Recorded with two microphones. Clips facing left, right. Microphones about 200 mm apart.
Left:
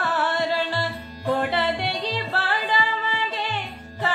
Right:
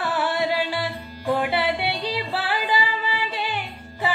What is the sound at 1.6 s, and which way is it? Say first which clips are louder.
Music: right 1 dB; 15° right (ahead or behind).